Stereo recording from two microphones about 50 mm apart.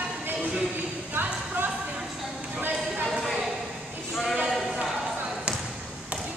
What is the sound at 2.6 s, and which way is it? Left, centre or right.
Clip-clop, right.